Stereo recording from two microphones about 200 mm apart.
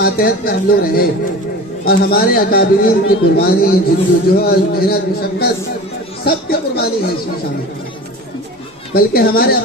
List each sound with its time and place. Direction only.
0.0 s a man's voice: 50° left (ahead or behind)
6.2 s a sound: 50° left (ahead or behind)
9.0 s a man's voice: 50° left (ahead or behind)